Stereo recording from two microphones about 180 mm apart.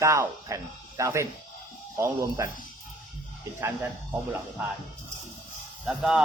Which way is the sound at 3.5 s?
15° right (ahead or behind).